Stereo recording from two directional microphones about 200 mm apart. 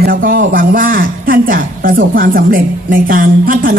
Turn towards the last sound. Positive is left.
turn(degrees=-45)  # may be behind; listen again after turning